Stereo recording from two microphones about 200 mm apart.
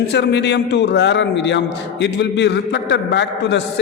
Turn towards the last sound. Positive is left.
turn(degrees=60)  # may be behind; listen again after turning